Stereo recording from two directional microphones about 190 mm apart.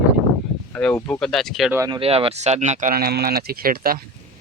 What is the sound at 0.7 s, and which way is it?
Speech, 5° left (ahead or behind).